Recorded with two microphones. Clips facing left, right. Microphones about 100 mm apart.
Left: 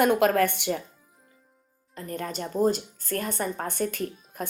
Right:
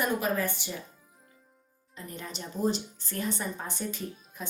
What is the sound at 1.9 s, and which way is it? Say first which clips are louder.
A woman's voice: left 8 dB; 50° left (ahead or behind).